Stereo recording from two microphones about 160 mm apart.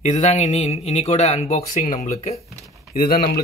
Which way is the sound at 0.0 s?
45° left (ahead or behind).